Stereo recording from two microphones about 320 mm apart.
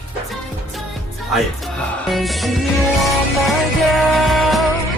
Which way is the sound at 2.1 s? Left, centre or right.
Centre.